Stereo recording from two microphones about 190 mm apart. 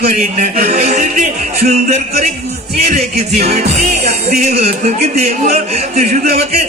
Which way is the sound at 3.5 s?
35° right (ahead or behind).